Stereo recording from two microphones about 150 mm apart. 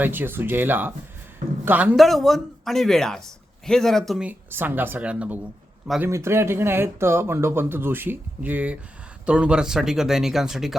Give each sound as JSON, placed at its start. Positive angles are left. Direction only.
{"t": 0.0, "sound": "speech", "side_deg": -15}
{"t": 2.0, "sound": "speech", "side_deg": 0}
{"t": 4.3, "sound": "speech", "side_deg": -10}